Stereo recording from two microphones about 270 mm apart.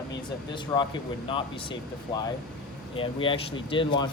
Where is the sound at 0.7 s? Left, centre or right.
Centre.